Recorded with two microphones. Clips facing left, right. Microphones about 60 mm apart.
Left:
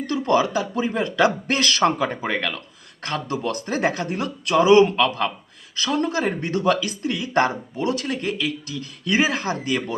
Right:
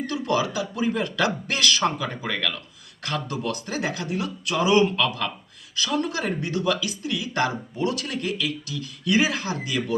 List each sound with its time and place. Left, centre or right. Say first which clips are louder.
0.1 s speech: left 6 dB; left
0.9 s speech: left 4 dB; left
4.5 s speech: left 6 dB; left